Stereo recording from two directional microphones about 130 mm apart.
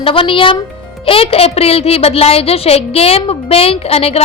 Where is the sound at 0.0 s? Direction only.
45° left (ahead or behind).